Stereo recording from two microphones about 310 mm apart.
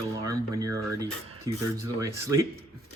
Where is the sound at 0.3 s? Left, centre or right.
Centre.